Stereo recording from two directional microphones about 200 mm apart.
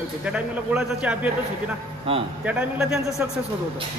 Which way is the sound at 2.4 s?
5° right (ahead or behind).